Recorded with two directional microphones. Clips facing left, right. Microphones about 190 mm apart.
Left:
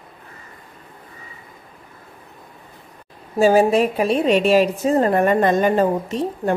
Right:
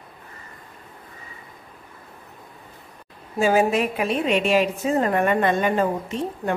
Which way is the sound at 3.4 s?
30° left (ahead or behind).